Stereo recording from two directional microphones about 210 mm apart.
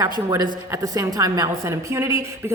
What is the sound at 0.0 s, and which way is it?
A woman's voice, 20° right (ahead or behind).